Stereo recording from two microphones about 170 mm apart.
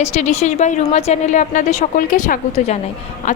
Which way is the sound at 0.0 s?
40° left (ahead or behind).